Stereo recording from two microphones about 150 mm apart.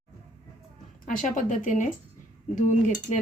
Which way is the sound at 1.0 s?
60° left (ahead or behind).